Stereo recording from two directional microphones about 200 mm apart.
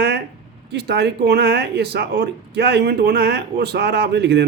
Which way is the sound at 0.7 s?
55° right (ahead or behind).